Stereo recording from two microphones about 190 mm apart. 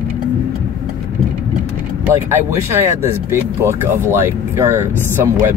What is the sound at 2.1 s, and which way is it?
Speech, 15° right (ahead or behind).